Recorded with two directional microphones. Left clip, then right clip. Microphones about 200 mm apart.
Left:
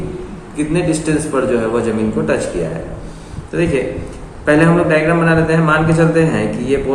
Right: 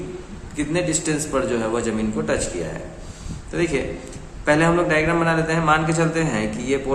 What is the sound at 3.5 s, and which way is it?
A man's voice, 45° right (ahead or behind).